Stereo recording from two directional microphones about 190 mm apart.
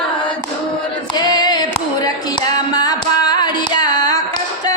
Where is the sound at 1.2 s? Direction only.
20° left (ahead or behind).